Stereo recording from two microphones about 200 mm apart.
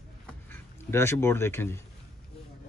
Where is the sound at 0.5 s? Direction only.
10° left (ahead or behind).